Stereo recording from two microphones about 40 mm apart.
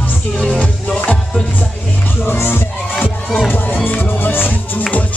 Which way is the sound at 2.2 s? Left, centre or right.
Left.